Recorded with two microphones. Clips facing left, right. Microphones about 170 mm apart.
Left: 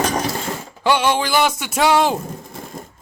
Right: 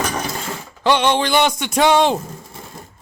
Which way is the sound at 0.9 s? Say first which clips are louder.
Right 1 dB; 5° left (ahead or behind).